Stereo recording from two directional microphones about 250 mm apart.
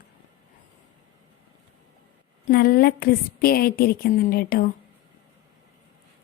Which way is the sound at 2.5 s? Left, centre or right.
Left.